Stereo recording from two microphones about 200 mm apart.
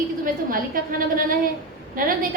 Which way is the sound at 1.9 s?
45° right (ahead or behind).